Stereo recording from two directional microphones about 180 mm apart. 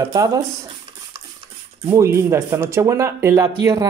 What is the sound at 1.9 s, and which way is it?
Speech, 15° right (ahead or behind).